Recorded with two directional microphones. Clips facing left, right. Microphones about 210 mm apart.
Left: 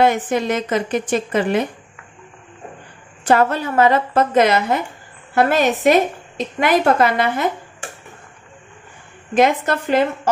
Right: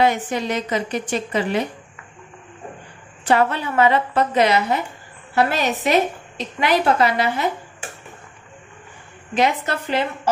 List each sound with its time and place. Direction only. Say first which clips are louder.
0.0 s a woman's voice: left 3 dB; 50° left (ahead or behind)
3.3 s a woman's voice: left 2 dB; 45° left (ahead or behind)
9.3 s a woman's voice: left 4 dB; 50° left (ahead or behind)